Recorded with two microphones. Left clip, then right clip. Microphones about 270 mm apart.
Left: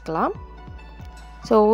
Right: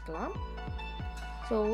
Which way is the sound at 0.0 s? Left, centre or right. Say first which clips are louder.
Left 15 dB; left.